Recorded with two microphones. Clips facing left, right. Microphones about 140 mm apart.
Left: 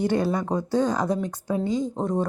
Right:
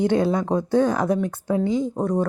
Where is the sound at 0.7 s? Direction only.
15° left (ahead or behind).